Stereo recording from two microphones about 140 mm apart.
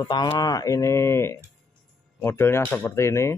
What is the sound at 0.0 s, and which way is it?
Speech, 30° left (ahead or behind).